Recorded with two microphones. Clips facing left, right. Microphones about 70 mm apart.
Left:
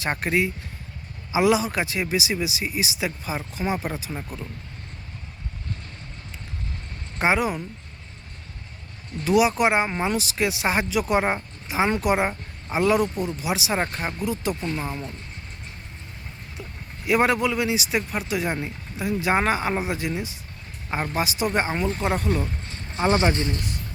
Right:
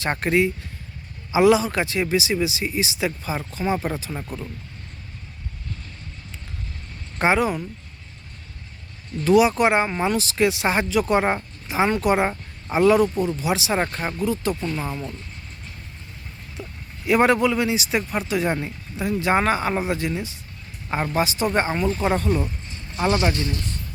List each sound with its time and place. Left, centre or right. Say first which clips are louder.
0.0 s speech: right 3 dB; centre
7.2 s speech: right 2 dB; centre
9.2 s speech: right 3 dB; centre
14.6 s speech: right 1 dB; left
17.1 s speech: right 3 dB; centre
22.9 s speech: even; left